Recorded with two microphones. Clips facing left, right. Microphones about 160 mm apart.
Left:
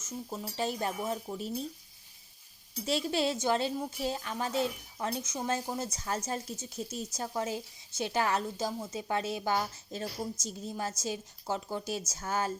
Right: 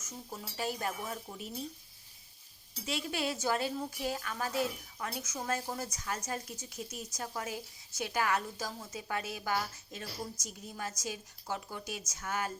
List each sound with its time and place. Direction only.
0.3 s speech: 25° left (ahead or behind)
2.8 s speech: 30° left (ahead or behind)